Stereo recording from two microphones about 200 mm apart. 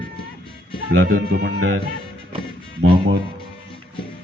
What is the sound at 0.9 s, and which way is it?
Speech, 60° right (ahead or behind).